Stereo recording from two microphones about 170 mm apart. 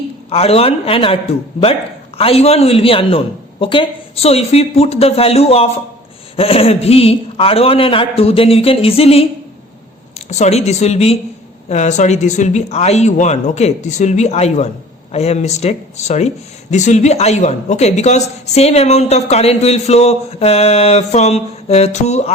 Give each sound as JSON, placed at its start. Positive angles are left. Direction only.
{"t": 0.3, "sound": "a woman's voice", "side_deg": 35}